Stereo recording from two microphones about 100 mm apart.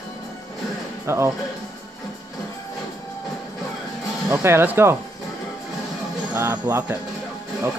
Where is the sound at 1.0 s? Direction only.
25° right (ahead or behind).